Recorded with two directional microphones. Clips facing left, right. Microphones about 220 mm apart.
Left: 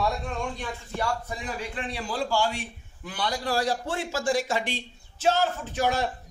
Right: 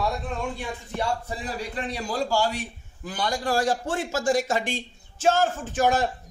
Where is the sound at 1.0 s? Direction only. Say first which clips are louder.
Right 2 dB; 30° right (ahead or behind).